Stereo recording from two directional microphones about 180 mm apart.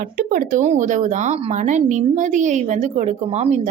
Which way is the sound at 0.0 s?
50° right (ahead or behind).